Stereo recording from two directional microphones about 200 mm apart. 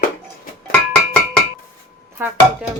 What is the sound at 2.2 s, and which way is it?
Speech, 10° right (ahead or behind).